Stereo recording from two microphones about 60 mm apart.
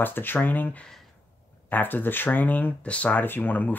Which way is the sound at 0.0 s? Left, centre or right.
Left.